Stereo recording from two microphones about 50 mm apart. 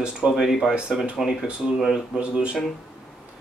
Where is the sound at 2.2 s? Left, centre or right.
Centre.